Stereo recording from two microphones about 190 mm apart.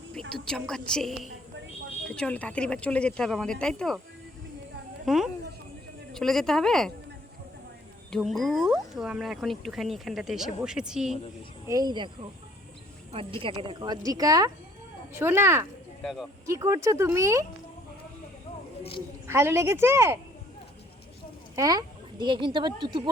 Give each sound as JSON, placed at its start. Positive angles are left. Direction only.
{"t": 0.1, "sound": "a woman's voice", "side_deg": 5}
{"t": 5.0, "sound": "speech", "side_deg": 0}
{"t": 8.1, "sound": "speech", "side_deg": 0}
{"t": 11.7, "sound": "speech", "side_deg": -20}
{"t": 13.1, "sound": "speech", "side_deg": -30}
{"t": 16.0, "sound": "speech", "side_deg": 0}
{"t": 16.5, "sound": "speech", "side_deg": -15}
{"t": 18.8, "sound": "a woman's voice", "side_deg": 30}
{"t": 19.3, "sound": "speech", "side_deg": -15}
{"t": 21.5, "sound": "speech", "side_deg": -20}